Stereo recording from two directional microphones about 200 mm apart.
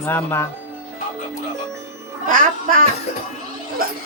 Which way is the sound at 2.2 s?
45° right (ahead or behind).